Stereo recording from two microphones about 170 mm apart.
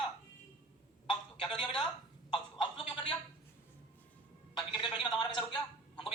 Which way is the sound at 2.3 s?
30° left (ahead or behind).